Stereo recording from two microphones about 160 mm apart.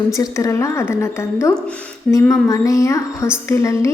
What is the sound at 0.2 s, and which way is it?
A woman's voice, 20° left (ahead or behind).